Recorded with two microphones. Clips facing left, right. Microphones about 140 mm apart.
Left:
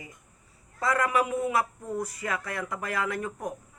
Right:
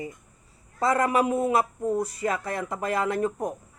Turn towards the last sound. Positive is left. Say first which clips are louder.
# right 5 dB
turn(degrees=-30)  # may be behind; listen again after turning